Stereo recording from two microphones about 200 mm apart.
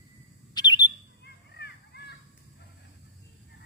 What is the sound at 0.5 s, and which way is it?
Bird, 20° left (ahead or behind).